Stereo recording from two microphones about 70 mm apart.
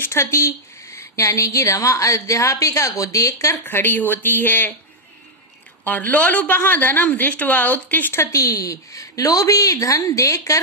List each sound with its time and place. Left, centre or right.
0.0 s a woman's voice: left
3.5 s a woman's voice: left
5.8 s a woman's voice: left
8.1 s a woman's voice: left